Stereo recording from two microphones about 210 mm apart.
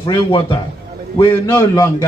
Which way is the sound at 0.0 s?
25° left (ahead or behind).